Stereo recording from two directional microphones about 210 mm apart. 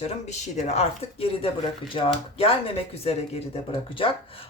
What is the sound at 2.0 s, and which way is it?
Speech, 25° left (ahead or behind).